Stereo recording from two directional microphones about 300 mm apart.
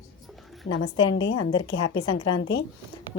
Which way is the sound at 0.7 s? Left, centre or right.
Left.